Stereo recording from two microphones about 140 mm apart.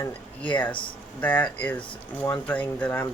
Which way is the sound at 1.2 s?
10° left (ahead or behind).